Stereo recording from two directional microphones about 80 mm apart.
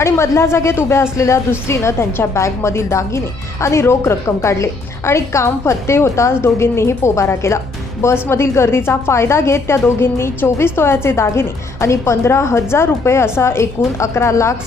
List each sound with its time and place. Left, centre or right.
0.0 s a woman's voice: left